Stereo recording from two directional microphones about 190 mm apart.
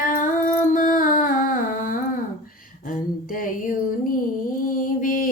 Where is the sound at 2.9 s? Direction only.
45° left (ahead or behind).